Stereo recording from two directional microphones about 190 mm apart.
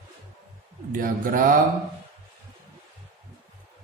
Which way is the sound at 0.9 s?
45° right (ahead or behind).